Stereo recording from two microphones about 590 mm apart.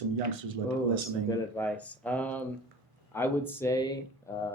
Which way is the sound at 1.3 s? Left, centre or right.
Centre.